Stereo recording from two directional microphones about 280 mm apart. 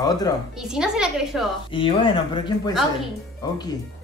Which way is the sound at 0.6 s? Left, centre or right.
Centre.